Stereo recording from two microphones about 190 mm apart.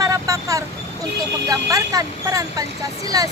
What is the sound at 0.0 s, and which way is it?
Vehicle, 15° right (ahead or behind).